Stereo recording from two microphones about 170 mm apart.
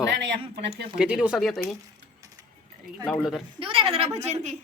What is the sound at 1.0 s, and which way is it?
Speech, 5° right (ahead or behind).